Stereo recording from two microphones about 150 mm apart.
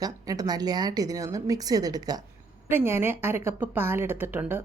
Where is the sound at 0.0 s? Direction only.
25° right (ahead or behind).